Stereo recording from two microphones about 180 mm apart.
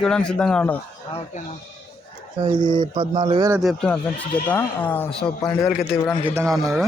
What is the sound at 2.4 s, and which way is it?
Speech, 25° right (ahead or behind).